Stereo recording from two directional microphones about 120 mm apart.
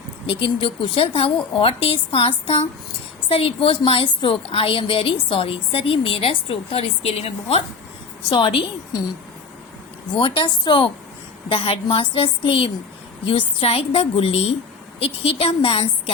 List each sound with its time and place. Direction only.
0.3 s a woman's voice: 45° left (ahead or behind)
8.3 s a woman's voice: 45° left (ahead or behind)
10.2 s a woman's voice: 45° left (ahead or behind)